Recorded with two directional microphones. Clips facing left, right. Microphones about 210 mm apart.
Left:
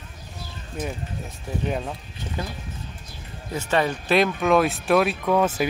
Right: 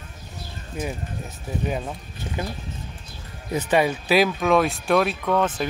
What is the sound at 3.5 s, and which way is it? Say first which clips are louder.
Speech: right 3 dB; 10° right (ahead or behind).